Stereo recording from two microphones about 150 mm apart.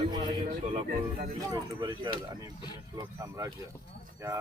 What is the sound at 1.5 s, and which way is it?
Speech, 25° right (ahead or behind).